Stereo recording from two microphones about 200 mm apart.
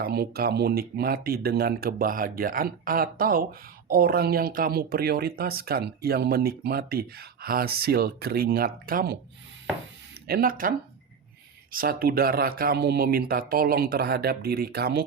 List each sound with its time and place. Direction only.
0.0 s speech: 50° right (ahead or behind)
10.2 s speech: 45° right (ahead or behind)